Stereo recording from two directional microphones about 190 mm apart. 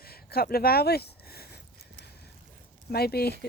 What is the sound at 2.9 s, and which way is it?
Speech, 55° left (ahead or behind).